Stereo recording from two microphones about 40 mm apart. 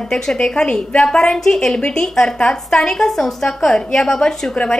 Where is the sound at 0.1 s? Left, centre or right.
Centre.